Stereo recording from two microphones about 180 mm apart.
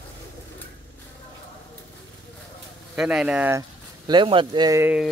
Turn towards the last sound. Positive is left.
turn(degrees=-5)  # may be behind; listen again after turning